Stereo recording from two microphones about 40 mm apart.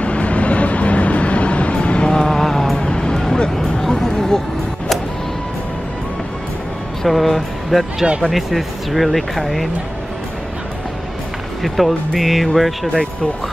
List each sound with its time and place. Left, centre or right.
0.0 s vehicle: left
2.1 s music: centre
2.8 s music: centre
3.5 s a sound: centre
7.0 s speech: centre
11.6 s speech: centre
12.8 s speech: centre